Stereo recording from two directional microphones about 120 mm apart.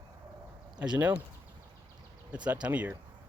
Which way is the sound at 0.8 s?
15° right (ahead or behind).